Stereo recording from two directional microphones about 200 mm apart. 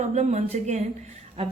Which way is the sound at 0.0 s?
35° right (ahead or behind).